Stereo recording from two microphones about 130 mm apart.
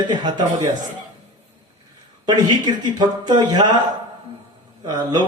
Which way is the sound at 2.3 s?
35° right (ahead or behind).